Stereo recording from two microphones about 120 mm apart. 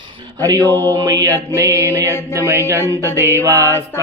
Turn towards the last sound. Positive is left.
turn(degrees=-25)  # may be behind; listen again after turning